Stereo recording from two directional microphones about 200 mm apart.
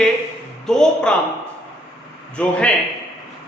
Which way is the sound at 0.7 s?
5° left (ahead or behind).